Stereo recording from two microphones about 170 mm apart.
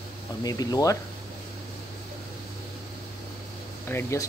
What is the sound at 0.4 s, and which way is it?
Speech, 20° left (ahead or behind).